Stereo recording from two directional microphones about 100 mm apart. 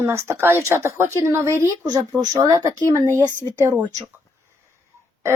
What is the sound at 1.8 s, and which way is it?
A woman's voice, 40° right (ahead or behind).